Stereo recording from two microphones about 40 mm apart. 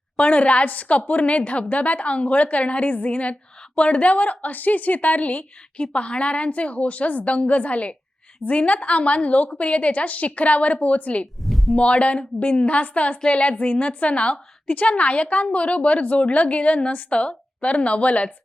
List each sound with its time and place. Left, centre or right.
0.2 s a woman's voice: left
11.4 s a sound: centre
11.8 s a woman's voice: left